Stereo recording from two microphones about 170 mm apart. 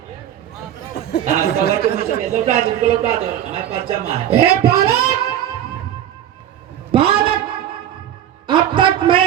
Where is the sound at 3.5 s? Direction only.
35° right (ahead or behind).